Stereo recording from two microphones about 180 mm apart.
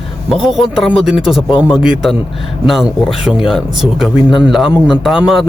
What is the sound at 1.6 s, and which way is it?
Speech, 5° right (ahead or behind).